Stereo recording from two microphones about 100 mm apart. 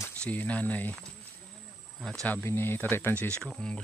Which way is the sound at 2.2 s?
20° left (ahead or behind).